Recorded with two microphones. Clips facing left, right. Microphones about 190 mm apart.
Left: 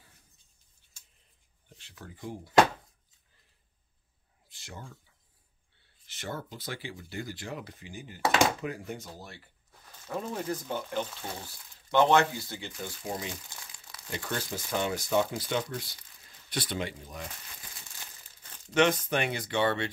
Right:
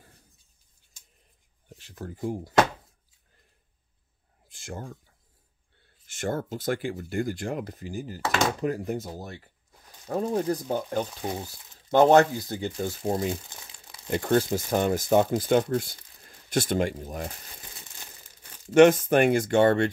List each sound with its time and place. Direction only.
1.7 s speech: 45° right (ahead or behind)
4.5 s a sound: 50° right (ahead or behind)
5.8 s speech: 50° right (ahead or behind)
13.3 s crumpling: 20° right (ahead or behind)
14.1 s speech: 45° right (ahead or behind)
18.7 s speech: 45° right (ahead or behind)